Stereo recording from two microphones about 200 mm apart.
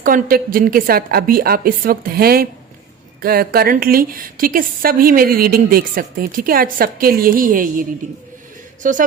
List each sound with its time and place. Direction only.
0.0 s a woman's voice: 45° right (ahead or behind)